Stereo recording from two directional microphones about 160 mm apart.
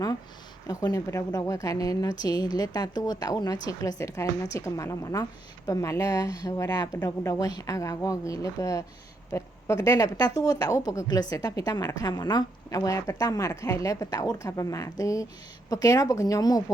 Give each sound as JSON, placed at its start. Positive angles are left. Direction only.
{"t": 0.7, "sound": "a woman's voice", "side_deg": 25}